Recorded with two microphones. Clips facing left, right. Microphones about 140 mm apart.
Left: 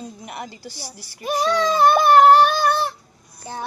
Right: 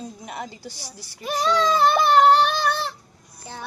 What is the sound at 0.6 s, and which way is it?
Speech, 20° right (ahead or behind).